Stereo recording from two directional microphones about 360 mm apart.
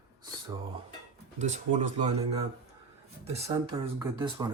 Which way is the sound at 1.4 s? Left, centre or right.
Centre.